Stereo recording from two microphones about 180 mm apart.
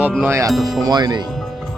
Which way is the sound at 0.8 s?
20° right (ahead or behind).